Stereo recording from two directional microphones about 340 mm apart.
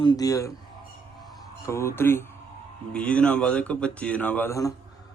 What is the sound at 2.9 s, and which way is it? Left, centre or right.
Speech, centre.